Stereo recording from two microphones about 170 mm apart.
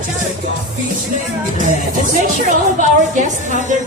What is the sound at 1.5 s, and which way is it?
Speech, 50° right (ahead or behind).